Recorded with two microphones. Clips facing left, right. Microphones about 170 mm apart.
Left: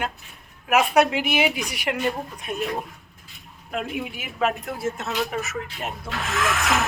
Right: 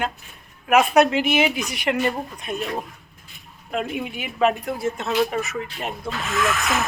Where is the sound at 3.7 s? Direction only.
5° left (ahead or behind).